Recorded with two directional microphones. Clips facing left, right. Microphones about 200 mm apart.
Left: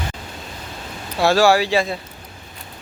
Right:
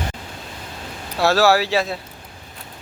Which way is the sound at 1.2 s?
Centre (ahead or behind).